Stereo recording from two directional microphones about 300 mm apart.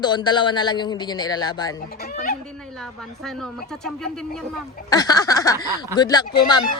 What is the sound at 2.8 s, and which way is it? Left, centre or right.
A woman's voice, centre.